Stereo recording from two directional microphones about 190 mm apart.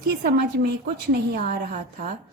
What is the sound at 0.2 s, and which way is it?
A woman's voice, 55° right (ahead or behind).